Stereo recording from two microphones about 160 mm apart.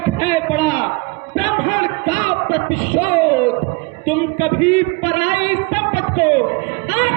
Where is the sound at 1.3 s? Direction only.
30° left (ahead or behind).